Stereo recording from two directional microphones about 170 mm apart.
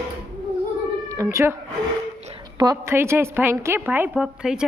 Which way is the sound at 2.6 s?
20° right (ahead or behind).